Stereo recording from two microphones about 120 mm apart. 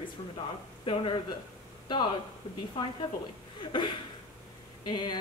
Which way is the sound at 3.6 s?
40° left (ahead or behind).